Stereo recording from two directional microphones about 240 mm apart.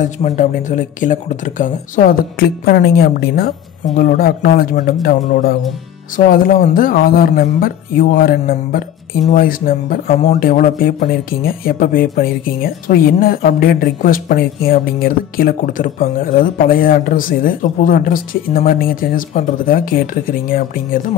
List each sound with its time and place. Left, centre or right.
0.0 s speech: left